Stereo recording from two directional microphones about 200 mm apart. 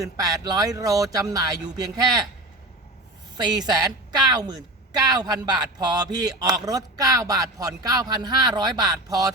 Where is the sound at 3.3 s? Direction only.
20° right (ahead or behind).